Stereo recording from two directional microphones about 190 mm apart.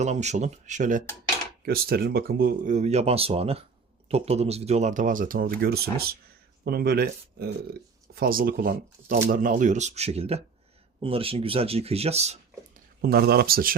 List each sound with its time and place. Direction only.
0.0 s speech: 35° right (ahead or behind)
1.6 s speech: 55° right (ahead or behind); by 12.8 s 35° right (ahead or behind)
13.0 s speech: 55° right (ahead or behind)